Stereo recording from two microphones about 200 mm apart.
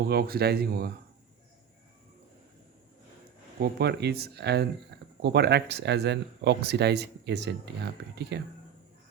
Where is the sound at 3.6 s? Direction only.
55° right (ahead or behind).